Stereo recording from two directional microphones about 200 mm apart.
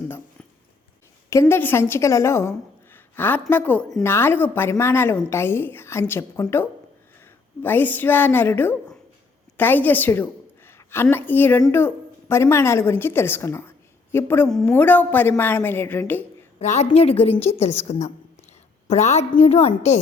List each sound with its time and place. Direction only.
1.3 s a woman's voice: 15° left (ahead or behind)
16.6 s a woman's voice: 35° left (ahead or behind)